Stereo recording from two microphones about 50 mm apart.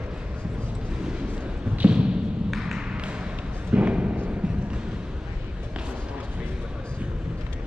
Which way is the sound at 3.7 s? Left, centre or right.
Right.